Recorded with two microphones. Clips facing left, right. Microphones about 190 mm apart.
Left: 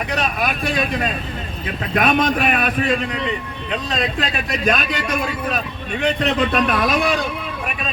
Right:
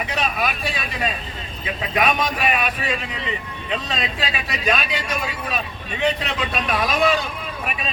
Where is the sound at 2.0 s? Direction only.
55° left (ahead or behind).